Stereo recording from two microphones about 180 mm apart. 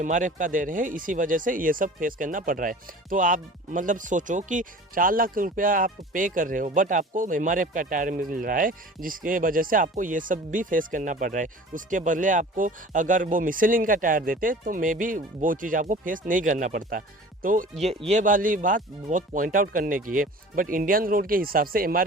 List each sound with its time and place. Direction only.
0.0 s speech: 45° right (ahead or behind)